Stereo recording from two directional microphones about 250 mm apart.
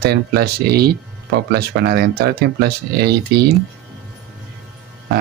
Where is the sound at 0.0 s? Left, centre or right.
Right.